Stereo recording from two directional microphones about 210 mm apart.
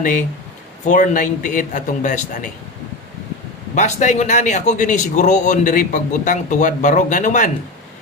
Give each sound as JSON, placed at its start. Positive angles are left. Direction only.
{"t": 0.9, "sound": "speech", "side_deg": 35}
{"t": 3.8, "sound": "speech", "side_deg": 35}